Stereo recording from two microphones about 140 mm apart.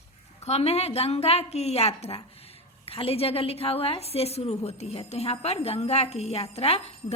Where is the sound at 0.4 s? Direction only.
50° left (ahead or behind).